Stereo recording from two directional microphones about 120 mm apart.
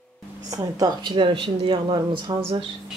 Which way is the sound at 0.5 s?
30° right (ahead or behind).